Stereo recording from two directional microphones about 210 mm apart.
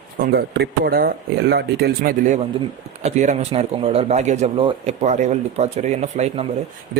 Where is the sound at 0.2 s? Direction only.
50° right (ahead or behind); by 6.4 s 30° right (ahead or behind).